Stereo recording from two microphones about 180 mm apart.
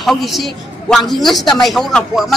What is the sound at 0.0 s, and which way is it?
A man's voice, centre (ahead or behind).